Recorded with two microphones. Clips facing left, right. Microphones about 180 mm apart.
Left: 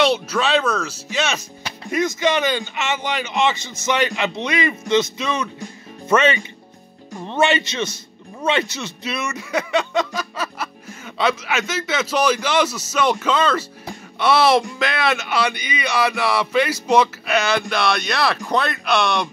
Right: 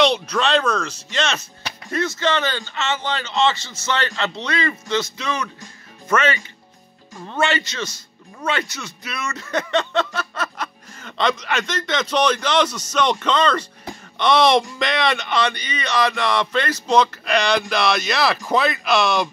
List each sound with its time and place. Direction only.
0.0 s a man's voice: 5° left (ahead or behind)